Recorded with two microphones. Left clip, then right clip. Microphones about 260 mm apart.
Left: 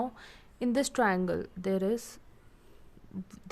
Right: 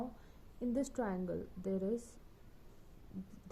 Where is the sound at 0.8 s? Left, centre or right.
Left.